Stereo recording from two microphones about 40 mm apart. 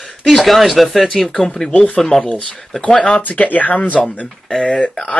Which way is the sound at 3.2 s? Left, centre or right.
Left.